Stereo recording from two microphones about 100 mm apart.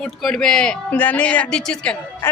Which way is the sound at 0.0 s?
5° left (ahead or behind).